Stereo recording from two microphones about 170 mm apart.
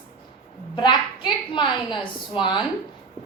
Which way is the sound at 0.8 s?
25° left (ahead or behind).